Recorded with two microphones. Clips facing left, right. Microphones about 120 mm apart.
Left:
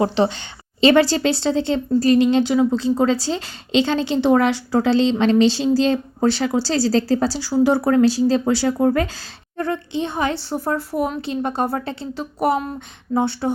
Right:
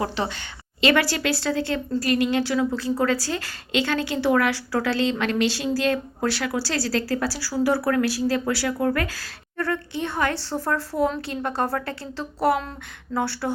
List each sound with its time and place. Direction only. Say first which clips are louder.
0.2 s a woman's voice: left 9 dB; 20° left (ahead or behind)